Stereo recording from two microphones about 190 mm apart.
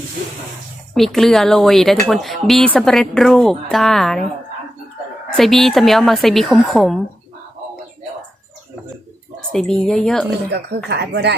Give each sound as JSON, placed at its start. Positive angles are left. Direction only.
{"t": 0.9, "sound": "a woman's voice", "side_deg": 0}
{"t": 5.4, "sound": "a woman's voice", "side_deg": 0}
{"t": 9.5, "sound": "a woman's voice", "side_deg": 0}
{"t": 10.8, "sound": "speech", "side_deg": -60}